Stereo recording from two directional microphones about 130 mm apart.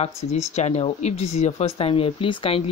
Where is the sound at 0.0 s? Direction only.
60° left (ahead or behind).